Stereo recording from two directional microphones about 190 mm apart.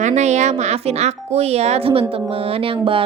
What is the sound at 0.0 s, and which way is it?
A woman's voice, 35° right (ahead or behind).